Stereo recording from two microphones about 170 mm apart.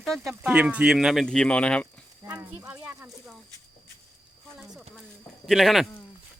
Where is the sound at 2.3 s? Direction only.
10° right (ahead or behind).